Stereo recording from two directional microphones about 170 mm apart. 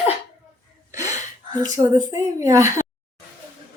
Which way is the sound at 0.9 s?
20° right (ahead or behind).